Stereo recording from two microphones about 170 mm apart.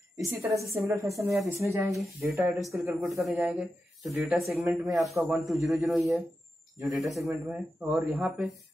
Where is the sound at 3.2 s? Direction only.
5° right (ahead or behind).